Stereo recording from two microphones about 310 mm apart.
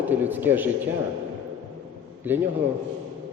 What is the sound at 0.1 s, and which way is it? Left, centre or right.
Speech, centre.